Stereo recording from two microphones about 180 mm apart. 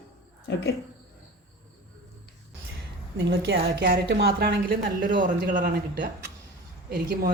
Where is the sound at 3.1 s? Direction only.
80° right.